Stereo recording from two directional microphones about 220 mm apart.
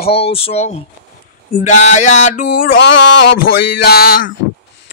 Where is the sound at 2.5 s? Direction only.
50° left (ahead or behind).